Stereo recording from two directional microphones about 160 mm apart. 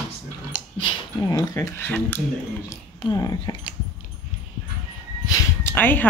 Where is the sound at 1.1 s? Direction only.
20° left (ahead or behind).